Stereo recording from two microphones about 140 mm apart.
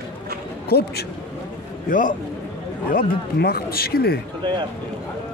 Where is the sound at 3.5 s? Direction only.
90° left.